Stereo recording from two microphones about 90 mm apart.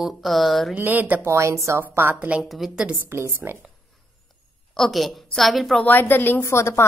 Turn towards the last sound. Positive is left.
turn(degrees=30)  # may be behind; listen again after turning